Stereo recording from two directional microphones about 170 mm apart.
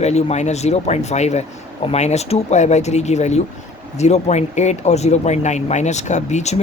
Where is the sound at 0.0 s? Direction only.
40° left (ahead or behind).